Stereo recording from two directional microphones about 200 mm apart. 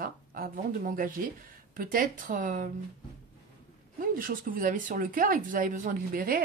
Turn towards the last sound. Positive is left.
turn(degrees=-45)  # may be behind; listen again after turning